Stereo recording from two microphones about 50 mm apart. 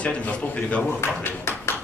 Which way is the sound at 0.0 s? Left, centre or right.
Left.